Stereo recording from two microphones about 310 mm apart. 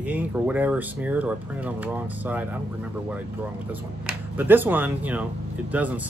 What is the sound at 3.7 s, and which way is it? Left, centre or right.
Speech, centre.